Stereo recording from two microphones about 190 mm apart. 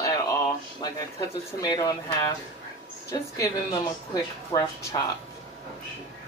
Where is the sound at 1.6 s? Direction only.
20° left (ahead or behind).